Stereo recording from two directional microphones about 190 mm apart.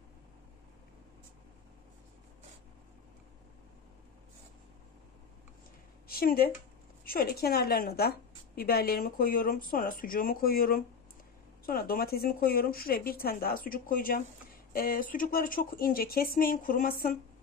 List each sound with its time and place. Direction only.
6.0 s a woman's voice: 50° left (ahead or behind)